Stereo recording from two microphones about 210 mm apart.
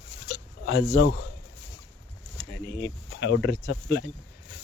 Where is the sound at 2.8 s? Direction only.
55° left (ahead or behind).